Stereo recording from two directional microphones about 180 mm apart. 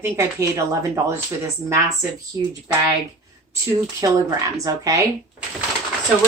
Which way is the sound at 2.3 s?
15° right (ahead or behind).